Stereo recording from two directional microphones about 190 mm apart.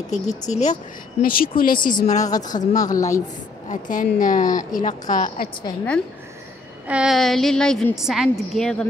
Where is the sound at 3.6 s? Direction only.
45° left (ahead or behind).